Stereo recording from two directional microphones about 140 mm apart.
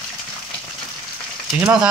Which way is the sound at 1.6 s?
10° right (ahead or behind).